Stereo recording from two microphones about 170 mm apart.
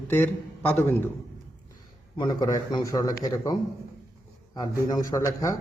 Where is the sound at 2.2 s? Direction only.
25° left (ahead or behind).